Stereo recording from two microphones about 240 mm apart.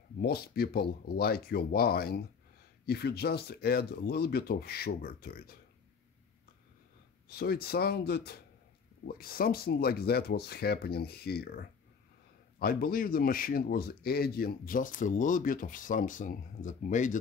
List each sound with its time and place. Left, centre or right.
0.2 s speech: left
7.2 s speech: left